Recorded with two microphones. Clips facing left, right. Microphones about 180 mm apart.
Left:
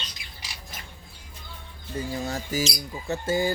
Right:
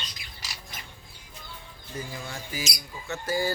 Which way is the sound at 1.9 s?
35° left (ahead or behind).